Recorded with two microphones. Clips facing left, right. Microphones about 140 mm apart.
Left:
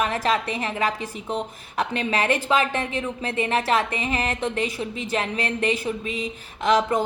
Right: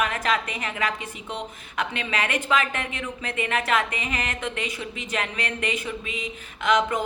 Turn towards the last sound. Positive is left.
turn(degrees=35)  # may be behind; listen again after turning